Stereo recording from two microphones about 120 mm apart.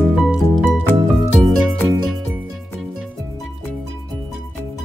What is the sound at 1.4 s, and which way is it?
Music, centre (ahead or behind).